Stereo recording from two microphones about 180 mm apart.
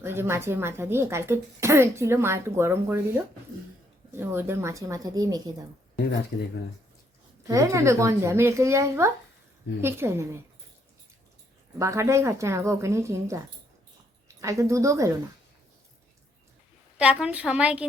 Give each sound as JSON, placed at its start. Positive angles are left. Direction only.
{"t": 0.0, "sound": "a woman's voice", "side_deg": -15}
{"t": 7.4, "sound": "a woman's voice", "side_deg": -20}
{"t": 11.8, "sound": "a woman's voice", "side_deg": -15}
{"t": 14.4, "sound": "a woman's voice", "side_deg": -15}
{"t": 17.0, "sound": "a woman's voice", "side_deg": -5}